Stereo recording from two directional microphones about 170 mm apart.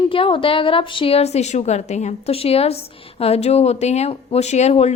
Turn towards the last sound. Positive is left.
turn(degrees=40)  # may be behind; listen again after turning